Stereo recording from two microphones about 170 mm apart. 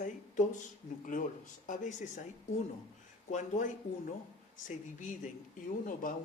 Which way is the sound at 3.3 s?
45° left (ahead or behind).